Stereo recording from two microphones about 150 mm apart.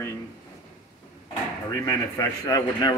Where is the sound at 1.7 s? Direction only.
20° left (ahead or behind).